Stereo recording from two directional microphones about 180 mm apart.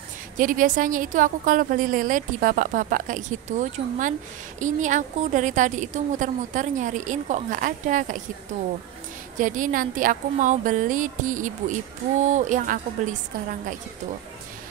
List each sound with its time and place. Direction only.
0.4 s a woman's voice: 50° right (ahead or behind)
9.4 s a woman's voice: 50° right (ahead or behind)